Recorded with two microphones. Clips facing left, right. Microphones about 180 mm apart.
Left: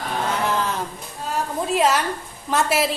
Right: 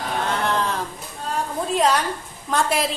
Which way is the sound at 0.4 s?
5° left (ahead or behind).